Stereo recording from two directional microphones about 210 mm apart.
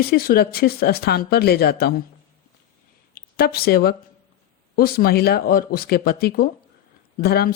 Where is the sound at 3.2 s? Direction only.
45° left (ahead or behind).